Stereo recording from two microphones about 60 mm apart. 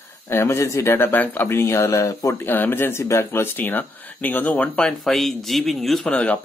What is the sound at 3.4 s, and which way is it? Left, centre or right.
Speech, left.